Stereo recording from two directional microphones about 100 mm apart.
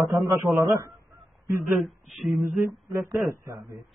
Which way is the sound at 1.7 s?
Centre (ahead or behind).